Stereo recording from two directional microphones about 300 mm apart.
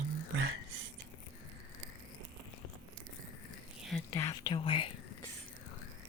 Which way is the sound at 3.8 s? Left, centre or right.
Centre.